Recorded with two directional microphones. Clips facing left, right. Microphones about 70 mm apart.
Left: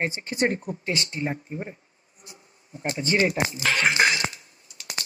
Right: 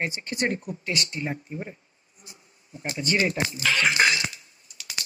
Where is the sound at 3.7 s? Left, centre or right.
Left.